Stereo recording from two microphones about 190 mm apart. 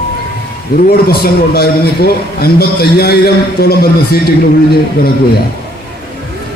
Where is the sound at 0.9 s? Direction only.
55° left (ahead or behind).